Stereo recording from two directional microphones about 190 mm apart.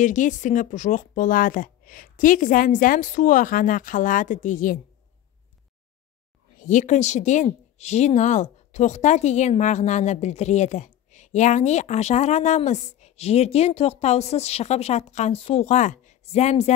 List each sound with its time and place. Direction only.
0.0 s speech: 40° left (ahead or behind)
6.6 s a woman's voice: 40° left (ahead or behind)